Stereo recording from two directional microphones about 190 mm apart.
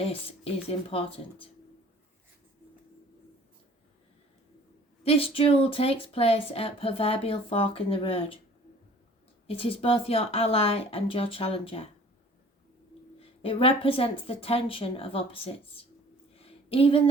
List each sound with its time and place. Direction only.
0.1 s speech: 30° left (ahead or behind)
5.0 s speech: 30° left (ahead or behind)
9.5 s speech: 30° left (ahead or behind)
13.4 s speech: 30° left (ahead or behind)
16.3 s a sound: 30° left (ahead or behind)